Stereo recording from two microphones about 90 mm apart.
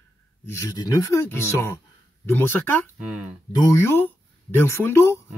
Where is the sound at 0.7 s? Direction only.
45° left (ahead or behind).